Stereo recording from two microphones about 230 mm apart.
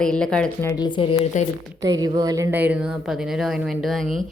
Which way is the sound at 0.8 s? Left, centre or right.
Centre.